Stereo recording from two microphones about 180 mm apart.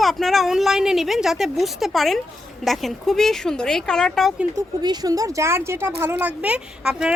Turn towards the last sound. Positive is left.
turn(degrees=-5)  # may be behind; listen again after turning